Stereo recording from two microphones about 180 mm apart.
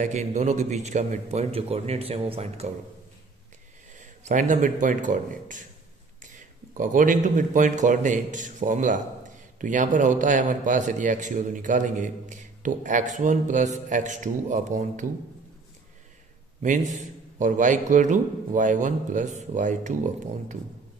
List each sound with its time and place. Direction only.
0.0 s a man's voice: 40° right (ahead or behind)
3.9 s a man's voice: 45° right (ahead or behind)
16.6 s a man's voice: 45° right (ahead or behind)